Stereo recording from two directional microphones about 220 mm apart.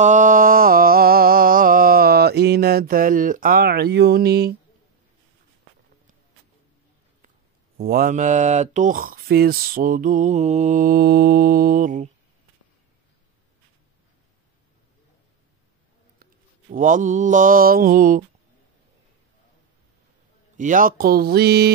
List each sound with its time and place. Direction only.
0.0 s a sound: 35° right (ahead or behind)
7.7 s speech: 40° right (ahead or behind)
16.7 s speech: 35° right (ahead or behind)
20.5 s speech: 35° right (ahead or behind)